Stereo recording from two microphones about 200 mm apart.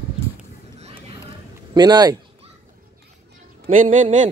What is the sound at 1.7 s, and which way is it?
Speech, 20° right (ahead or behind).